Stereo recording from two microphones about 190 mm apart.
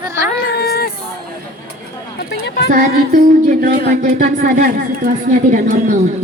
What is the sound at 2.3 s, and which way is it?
Child singing, 60° left (ahead or behind).